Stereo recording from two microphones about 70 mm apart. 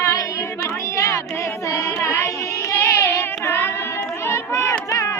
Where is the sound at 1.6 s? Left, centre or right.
Left.